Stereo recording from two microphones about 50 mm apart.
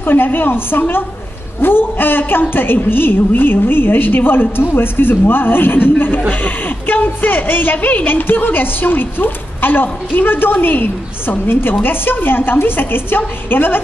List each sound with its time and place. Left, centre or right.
0.0 s a woman's voice: left